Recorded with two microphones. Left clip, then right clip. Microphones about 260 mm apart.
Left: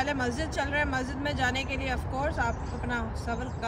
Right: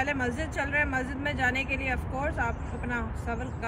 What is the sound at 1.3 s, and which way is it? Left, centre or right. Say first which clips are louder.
Speech: right 2 dB; left.